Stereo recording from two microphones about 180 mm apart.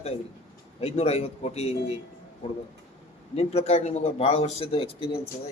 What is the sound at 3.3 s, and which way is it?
A man's voice, 35° left (ahead or behind).